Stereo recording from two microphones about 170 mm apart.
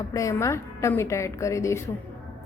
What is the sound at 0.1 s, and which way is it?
Speech, 20° left (ahead or behind).